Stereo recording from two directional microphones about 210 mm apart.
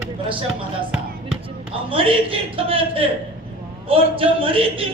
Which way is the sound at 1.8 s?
25° right (ahead or behind).